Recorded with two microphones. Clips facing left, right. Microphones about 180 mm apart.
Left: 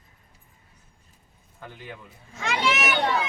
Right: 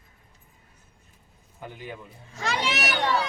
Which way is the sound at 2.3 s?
35° right (ahead or behind).